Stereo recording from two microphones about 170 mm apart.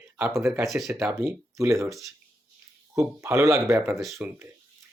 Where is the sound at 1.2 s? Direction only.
20° right (ahead or behind).